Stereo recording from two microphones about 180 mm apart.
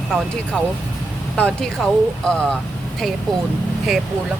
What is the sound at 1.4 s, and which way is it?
Speech, 5° left (ahead or behind).